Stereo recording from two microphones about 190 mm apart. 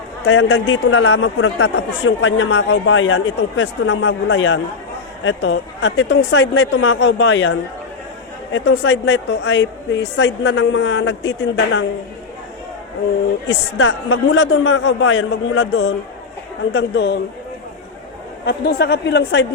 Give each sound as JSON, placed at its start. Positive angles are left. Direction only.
{"t": 0.3, "sound": "speech", "side_deg": 75}
{"t": 3.6, "sound": "speech", "side_deg": 80}
{"t": 5.2, "sound": "a woman's voice", "side_deg": 75}
{"t": 13.5, "sound": "speech", "side_deg": 75}
{"t": 16.7, "sound": "speech", "side_deg": 65}
{"t": 18.4, "sound": "speech", "side_deg": 55}